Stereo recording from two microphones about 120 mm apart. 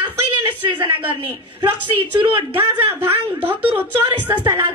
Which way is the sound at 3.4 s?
15° right (ahead or behind).